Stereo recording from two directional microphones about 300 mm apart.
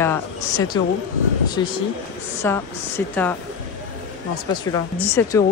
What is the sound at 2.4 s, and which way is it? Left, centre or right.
Speech, centre.